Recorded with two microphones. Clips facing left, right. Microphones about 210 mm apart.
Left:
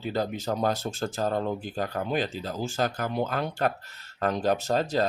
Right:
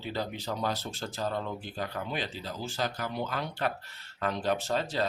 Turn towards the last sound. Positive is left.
turn(degrees=40)  # may be behind; listen again after turning